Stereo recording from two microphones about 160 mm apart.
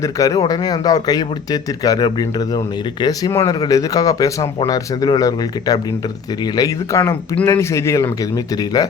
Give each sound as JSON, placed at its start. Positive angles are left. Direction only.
{"t": 0.0, "sound": "speech", "side_deg": 20}